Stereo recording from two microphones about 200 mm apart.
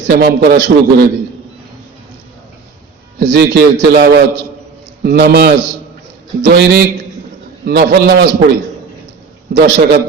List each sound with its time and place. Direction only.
0.1 s a man's voice: 55° right (ahead or behind)
3.2 s a man's voice: 60° right (ahead or behind)
9.6 s a man's voice: 55° right (ahead or behind)